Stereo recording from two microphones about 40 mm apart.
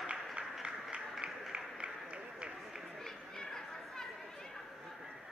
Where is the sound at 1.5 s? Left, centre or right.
Right.